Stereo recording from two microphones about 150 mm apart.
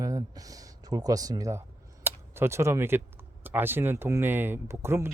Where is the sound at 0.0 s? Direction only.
25° right (ahead or behind).